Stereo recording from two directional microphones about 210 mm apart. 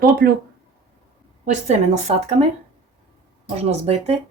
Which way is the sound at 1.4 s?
35° right (ahead or behind).